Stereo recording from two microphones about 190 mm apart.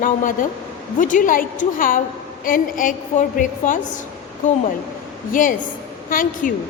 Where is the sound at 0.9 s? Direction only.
45° left (ahead or behind).